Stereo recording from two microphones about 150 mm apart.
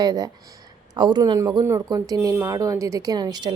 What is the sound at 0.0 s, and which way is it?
Speech, 25° right (ahead or behind).